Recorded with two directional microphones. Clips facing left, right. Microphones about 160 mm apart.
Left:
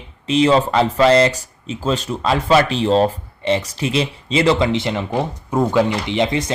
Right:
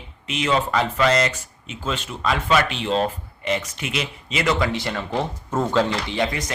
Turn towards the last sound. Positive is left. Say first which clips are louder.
# left 5 dB
turn(degrees=25)  # may be behind; listen again after turning